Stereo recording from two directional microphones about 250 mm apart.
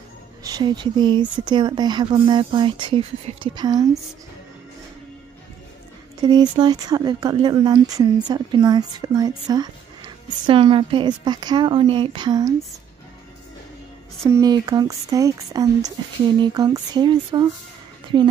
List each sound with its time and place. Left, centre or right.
0.4 s speech: centre
6.2 s speech: centre
14.3 s speech: centre